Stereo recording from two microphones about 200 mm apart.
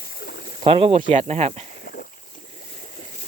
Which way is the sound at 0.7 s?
30° right (ahead or behind).